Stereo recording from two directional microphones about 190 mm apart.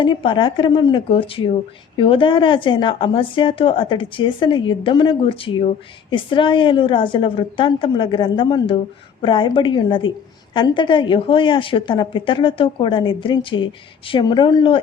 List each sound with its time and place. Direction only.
0.0 s speech: 25° left (ahead or behind)